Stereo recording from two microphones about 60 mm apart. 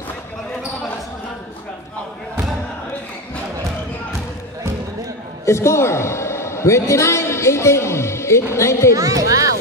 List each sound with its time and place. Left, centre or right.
5.4 s a woman's voice: left
8.9 s speech: right